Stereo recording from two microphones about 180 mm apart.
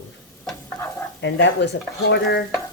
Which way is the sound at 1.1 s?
75° left (ahead or behind).